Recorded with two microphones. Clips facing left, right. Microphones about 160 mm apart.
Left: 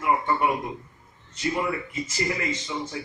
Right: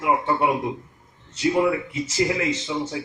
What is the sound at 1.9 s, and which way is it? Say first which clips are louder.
Speech: right 5 dB; 90° right.